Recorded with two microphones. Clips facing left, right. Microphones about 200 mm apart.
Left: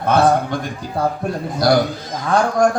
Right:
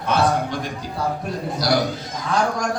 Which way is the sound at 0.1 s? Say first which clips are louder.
Left 5 dB; 50° left (ahead or behind).